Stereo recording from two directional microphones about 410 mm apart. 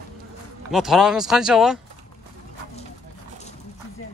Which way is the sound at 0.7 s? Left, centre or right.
Centre.